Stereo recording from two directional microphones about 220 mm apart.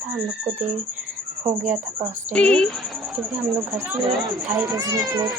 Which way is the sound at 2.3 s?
5° left (ahead or behind).